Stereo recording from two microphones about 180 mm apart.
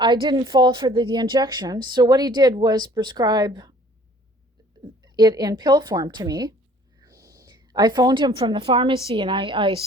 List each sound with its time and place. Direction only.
0.0 s a woman's voice: 25° right (ahead or behind)
4.8 s a woman's voice: 25° right (ahead or behind)